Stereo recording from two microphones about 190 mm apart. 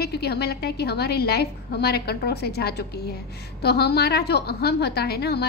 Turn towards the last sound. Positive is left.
turn(degrees=60)  # may be behind; listen again after turning